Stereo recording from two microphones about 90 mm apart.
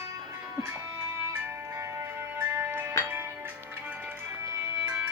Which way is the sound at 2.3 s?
20° right (ahead or behind).